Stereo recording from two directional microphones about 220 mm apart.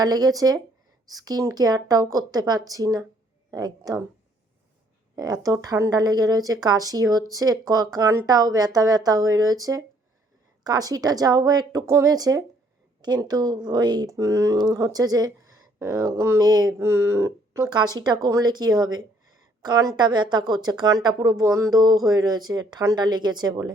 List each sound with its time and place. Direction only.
0.0 s speech: 15° right (ahead or behind)
5.1 s a woman's voice: 15° right (ahead or behind)